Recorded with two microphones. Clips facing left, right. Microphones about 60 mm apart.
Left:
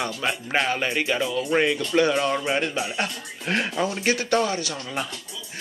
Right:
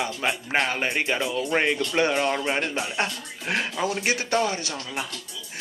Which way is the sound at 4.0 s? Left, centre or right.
Right.